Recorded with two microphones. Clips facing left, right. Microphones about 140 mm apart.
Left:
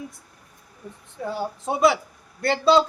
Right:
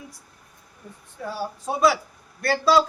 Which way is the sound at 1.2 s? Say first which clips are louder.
Left 2 dB; 20° left (ahead or behind).